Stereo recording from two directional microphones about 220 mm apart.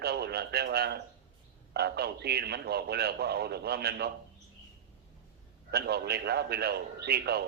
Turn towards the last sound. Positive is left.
turn(degrees=-45)  # may be behind; listen again after turning